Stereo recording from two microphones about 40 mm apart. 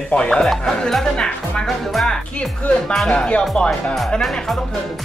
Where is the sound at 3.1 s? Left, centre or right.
Left.